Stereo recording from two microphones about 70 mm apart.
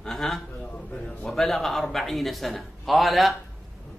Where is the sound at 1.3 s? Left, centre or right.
Centre.